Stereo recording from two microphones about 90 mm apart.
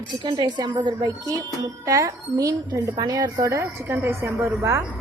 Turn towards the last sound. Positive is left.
turn(degrees=-25)  # may be behind; listen again after turning